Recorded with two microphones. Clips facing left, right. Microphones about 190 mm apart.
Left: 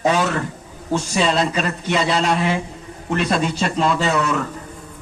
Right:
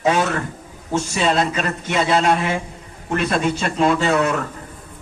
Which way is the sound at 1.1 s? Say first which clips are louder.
Even; 50° right (ahead or behind).